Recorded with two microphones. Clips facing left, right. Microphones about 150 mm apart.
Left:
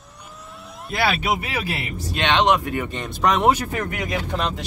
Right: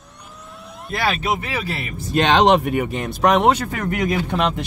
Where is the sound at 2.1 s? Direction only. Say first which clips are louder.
Right 4 dB; 40° right (ahead or behind).